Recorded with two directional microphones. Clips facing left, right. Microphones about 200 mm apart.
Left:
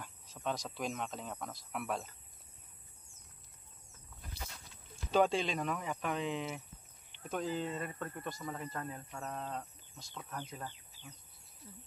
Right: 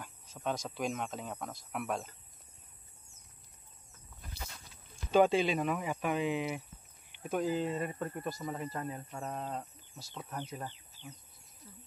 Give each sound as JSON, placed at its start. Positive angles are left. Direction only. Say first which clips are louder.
{"t": 0.0, "sound": "speech", "louder": "right 2 dB", "side_deg": 0}
{"t": 5.1, "sound": "speech", "louder": "right 4 dB", "side_deg": -5}